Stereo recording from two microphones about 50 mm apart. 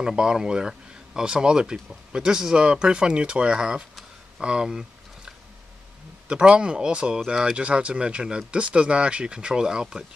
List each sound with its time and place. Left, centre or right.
0.0 s speech: centre
4.4 s a sound: centre
6.2 s speech: right